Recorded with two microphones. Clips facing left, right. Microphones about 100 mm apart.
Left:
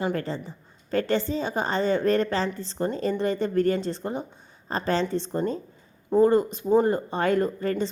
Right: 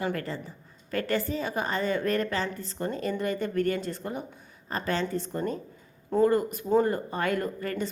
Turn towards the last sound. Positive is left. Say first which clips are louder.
# left 6 dB
turn(degrees=30)  # may be behind; listen again after turning